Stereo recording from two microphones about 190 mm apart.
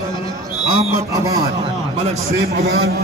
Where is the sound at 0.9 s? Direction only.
15° right (ahead or behind).